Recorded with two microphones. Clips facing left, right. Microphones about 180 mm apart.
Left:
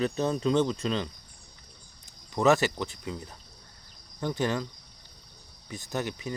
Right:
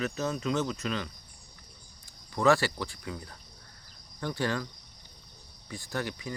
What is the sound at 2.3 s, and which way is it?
Speech, 20° left (ahead or behind).